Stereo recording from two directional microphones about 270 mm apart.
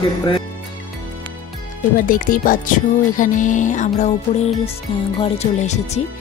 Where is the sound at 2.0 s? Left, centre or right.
Left.